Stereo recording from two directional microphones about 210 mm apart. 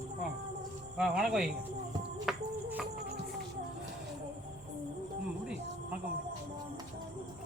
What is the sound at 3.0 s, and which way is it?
Music, 50° right (ahead or behind).